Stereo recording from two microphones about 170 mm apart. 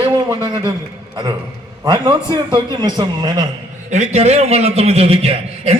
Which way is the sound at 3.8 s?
40° right (ahead or behind).